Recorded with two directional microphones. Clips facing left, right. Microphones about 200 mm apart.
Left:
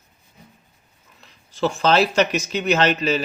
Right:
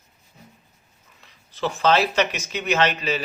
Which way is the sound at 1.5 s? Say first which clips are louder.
Left 2 dB; 45° left (ahead or behind).